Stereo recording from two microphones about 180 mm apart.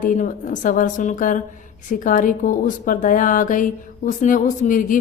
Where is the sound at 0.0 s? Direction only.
45° left (ahead or behind).